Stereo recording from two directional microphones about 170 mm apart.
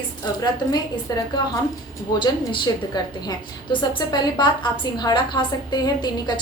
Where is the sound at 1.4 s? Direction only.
25° left (ahead or behind).